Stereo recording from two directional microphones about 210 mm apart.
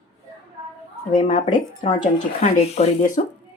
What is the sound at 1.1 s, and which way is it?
Speech, 35° left (ahead or behind).